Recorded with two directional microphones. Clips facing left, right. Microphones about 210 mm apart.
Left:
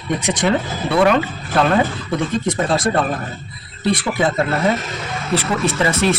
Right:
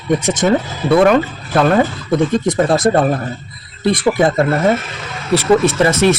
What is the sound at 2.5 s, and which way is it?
Speech, 45° right (ahead or behind).